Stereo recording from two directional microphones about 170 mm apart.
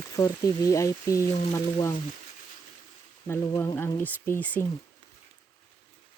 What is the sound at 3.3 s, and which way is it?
Speech, 15° left (ahead or behind).